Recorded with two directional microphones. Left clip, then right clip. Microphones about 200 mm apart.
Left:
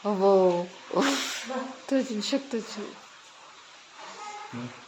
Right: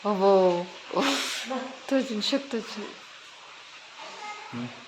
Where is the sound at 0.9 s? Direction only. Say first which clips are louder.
Even; 20° left (ahead or behind).